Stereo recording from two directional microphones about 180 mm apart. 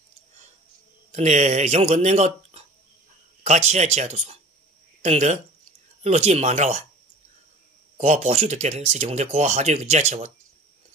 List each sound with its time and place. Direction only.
1.1 s speech: 40° right (ahead or behind)
8.0 s speech: 40° right (ahead or behind)